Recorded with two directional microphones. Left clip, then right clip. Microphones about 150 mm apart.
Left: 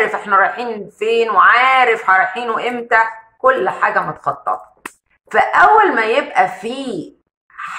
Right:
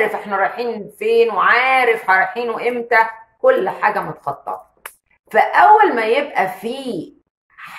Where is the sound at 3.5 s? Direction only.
20° right (ahead or behind).